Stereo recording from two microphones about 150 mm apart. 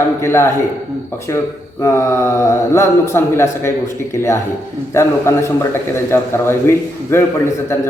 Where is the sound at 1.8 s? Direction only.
20° left (ahead or behind).